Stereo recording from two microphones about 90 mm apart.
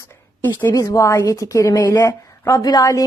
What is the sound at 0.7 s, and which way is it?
A woman's voice, 40° left (ahead or behind).